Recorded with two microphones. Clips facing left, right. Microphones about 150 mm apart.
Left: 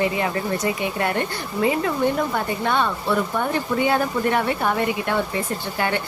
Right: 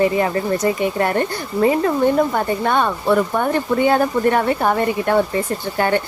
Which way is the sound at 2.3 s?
50° right (ahead or behind).